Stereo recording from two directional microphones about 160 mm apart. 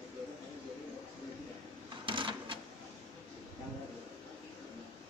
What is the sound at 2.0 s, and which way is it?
Sewing machine, 30° right (ahead or behind).